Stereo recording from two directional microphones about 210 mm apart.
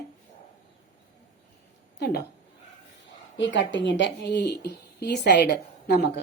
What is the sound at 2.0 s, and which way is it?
Speech, 50° left (ahead or behind).